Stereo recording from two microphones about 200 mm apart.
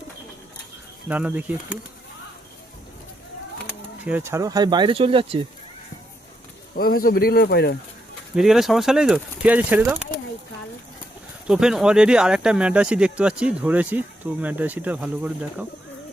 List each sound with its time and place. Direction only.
1.0 s speech: 10° right (ahead or behind)
3.7 s speech: 10° right (ahead or behind); by 5.5 s 30° right (ahead or behind)
6.7 s speech: 45° left (ahead or behind)
8.4 s speech: centre (ahead or behind)
11.4 s speech: 5° right (ahead or behind)